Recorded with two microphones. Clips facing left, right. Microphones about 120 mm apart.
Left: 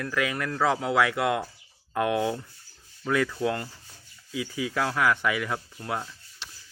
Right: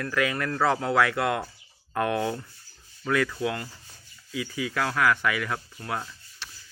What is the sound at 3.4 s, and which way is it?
Rub, 35° left (ahead or behind).